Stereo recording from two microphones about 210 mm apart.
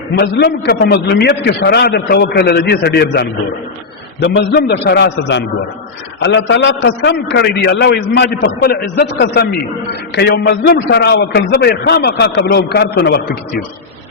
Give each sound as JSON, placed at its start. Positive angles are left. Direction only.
{"t": 0.2, "sound": "a man's voice", "side_deg": 50}